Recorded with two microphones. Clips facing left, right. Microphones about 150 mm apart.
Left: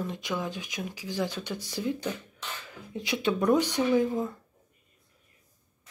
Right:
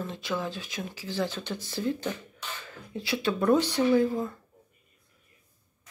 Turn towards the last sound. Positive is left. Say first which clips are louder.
# right 1 dB
turn(degrees=15)  # may be behind; listen again after turning